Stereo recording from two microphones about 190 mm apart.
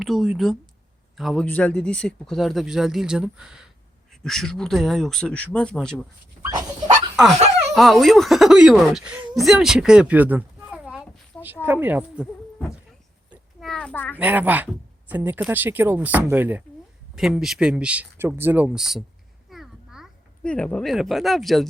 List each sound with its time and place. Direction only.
0.0 s speech: centre (ahead or behind)
6.4 s dog: 20° right (ahead or behind)
7.7 s speech: centre (ahead or behind)
13.3 s a sound: centre (ahead or behind)
14.2 s speech: 10° right (ahead or behind)
19.5 s a sound: centre (ahead or behind)